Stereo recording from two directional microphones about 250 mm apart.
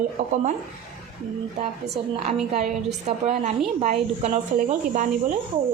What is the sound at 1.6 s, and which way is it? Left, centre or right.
Speech, right.